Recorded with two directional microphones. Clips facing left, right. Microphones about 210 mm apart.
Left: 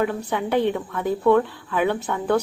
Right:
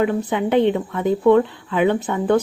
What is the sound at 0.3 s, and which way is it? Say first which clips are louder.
A woman's voice: right 4 dB; 20° right (ahead or behind).